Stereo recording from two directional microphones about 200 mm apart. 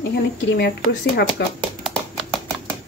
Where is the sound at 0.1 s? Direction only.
55° left (ahead or behind).